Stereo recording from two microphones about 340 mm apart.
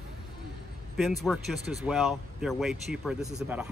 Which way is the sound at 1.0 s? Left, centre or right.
Centre.